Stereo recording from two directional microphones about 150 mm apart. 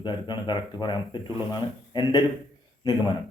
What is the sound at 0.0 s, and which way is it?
A man's voice, 30° left (ahead or behind).